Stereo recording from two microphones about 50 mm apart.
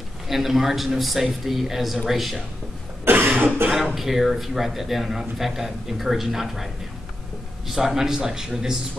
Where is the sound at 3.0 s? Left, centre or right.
Right.